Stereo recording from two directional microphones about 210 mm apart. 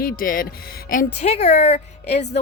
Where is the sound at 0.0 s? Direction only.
40° left (ahead or behind).